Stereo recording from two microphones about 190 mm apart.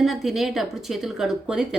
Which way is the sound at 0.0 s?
Centre (ahead or behind).